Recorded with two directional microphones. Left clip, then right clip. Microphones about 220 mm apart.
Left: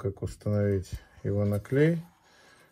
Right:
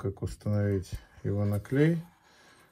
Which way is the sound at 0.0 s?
40° right (ahead or behind).